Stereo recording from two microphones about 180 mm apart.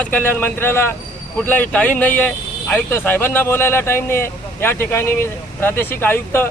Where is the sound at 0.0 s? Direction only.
10° left (ahead or behind).